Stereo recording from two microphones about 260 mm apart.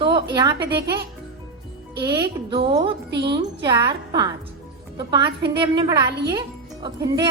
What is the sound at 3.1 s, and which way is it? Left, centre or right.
Speech, right.